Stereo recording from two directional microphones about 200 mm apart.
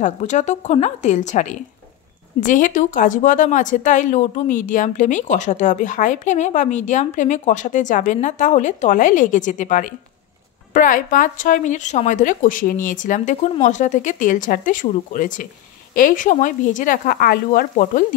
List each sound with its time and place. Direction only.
0.0 s a woman's voice: 35° left (ahead or behind)